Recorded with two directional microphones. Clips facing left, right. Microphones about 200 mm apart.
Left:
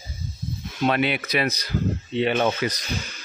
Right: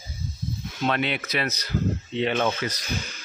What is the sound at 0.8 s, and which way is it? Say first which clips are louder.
Speech: left 3 dB; 10° left (ahead or behind).